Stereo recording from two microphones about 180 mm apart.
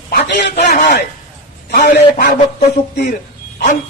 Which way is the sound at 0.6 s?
45° left (ahead or behind).